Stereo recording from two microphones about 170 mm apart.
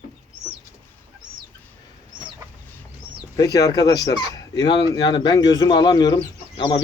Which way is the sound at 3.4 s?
20° left (ahead or behind).